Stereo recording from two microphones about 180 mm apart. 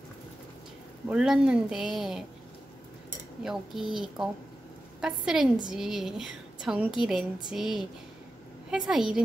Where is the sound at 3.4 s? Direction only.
Centre (ahead or behind).